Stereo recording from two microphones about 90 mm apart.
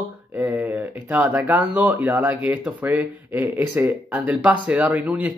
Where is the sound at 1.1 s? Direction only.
20° right (ahead or behind).